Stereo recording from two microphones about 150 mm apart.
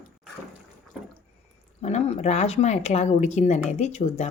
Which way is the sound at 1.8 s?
45° left (ahead or behind).